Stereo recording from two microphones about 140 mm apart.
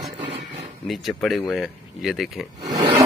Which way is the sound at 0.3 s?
50° right (ahead or behind).